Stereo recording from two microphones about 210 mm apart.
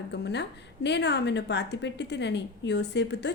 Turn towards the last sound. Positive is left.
turn(degrees=55)  # may be behind; listen again after turning